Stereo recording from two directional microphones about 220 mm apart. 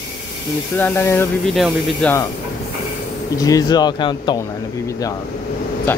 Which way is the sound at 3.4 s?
15° left (ahead or behind).